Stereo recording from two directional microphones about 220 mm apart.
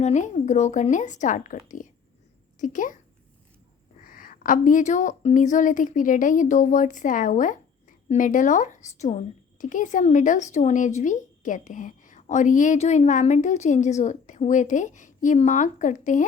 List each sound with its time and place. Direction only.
0.0 s speech: 35° left (ahead or behind)
4.0 s speech: 40° left (ahead or behind)